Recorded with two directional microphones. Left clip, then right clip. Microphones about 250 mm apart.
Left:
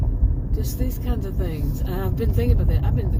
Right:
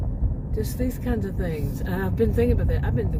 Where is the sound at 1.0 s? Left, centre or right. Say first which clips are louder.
Right 2 dB; right.